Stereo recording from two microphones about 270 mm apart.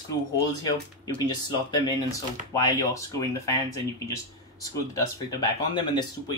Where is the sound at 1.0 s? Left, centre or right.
Centre.